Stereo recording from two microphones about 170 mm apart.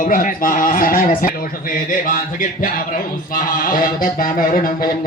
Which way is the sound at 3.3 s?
55° left (ahead or behind).